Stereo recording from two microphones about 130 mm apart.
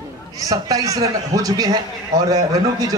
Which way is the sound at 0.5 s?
25° right (ahead or behind).